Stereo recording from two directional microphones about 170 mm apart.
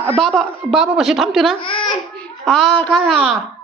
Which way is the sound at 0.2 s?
Centre (ahead or behind).